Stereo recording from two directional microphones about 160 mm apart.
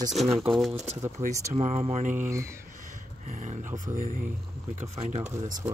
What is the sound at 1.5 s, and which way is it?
Speech, 45° right (ahead or behind).